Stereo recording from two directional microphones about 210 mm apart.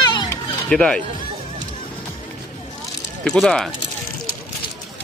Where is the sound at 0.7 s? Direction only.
5° left (ahead or behind).